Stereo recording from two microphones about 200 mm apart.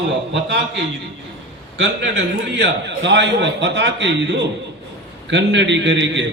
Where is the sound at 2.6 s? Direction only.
65° right (ahead or behind).